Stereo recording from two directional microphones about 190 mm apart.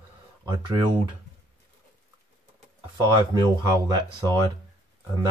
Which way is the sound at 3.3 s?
20° right (ahead or behind).